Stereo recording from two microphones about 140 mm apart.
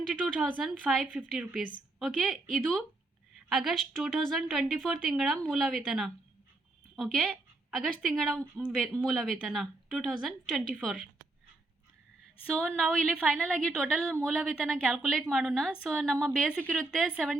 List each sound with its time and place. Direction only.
0.1 s a woman's voice: 5° right (ahead or behind)
12.5 s a woman's voice: 5° left (ahead or behind)